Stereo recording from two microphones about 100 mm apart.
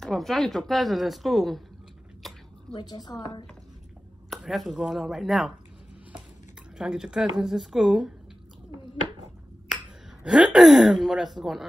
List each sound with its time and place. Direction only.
0.0 s speech: 5° left (ahead or behind)
2.2 s a sound: centre (ahead or behind)
2.7 s a woman's voice: 45° left (ahead or behind)
4.3 s speech: centre (ahead or behind)
6.8 s speech: 5° right (ahead or behind)
9.7 s finger snapping: 5° right (ahead or behind)
10.2 s speech: 5° right (ahead or behind)